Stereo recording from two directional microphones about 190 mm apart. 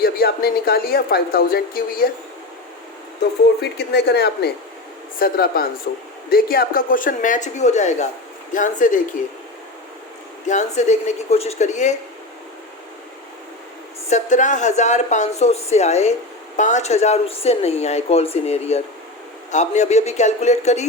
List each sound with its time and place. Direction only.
0.0 s speech: 50° left (ahead or behind)
3.6 s speech: 60° left (ahead or behind); by 9.0 s 45° left (ahead or behind)
10.4 s speech: 40° left (ahead or behind)
14.1 s speech: 40° left (ahead or behind)